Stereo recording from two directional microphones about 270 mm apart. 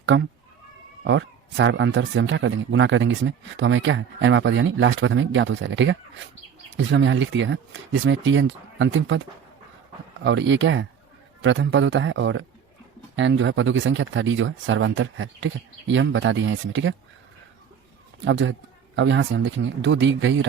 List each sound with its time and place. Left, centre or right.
0.0 s speech: right
10.2 s speech: right
18.3 s speech: right